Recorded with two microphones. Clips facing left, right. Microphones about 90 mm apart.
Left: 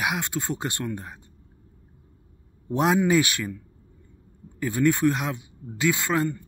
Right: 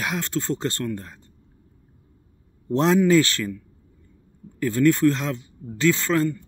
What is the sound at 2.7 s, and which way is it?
Speech, 15° left (ahead or behind).